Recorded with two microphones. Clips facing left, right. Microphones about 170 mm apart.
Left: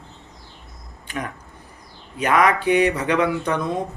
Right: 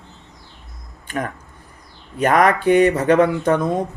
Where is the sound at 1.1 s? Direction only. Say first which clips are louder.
Right 4 dB; 50° right (ahead or behind).